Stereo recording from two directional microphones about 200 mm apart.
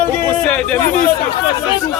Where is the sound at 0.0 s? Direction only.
5° left (ahead or behind).